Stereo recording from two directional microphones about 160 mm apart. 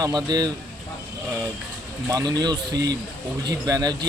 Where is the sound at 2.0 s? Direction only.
25° right (ahead or behind).